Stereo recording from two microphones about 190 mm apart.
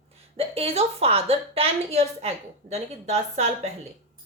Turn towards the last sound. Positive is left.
turn(degrees=-35)  # may be behind; listen again after turning